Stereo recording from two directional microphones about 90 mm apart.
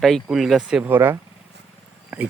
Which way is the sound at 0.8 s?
25° right (ahead or behind).